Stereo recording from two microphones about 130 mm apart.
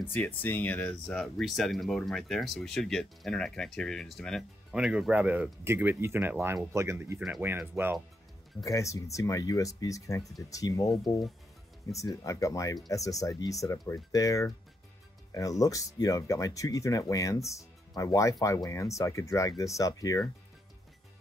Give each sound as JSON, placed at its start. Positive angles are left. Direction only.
{"t": 0.1, "sound": "speech", "side_deg": 15}
{"t": 8.6, "sound": "speech", "side_deg": 25}